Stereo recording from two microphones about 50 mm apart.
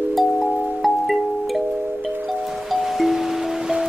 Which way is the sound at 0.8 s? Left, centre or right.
Centre.